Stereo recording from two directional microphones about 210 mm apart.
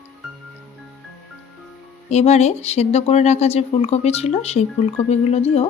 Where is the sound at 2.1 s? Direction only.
30° left (ahead or behind).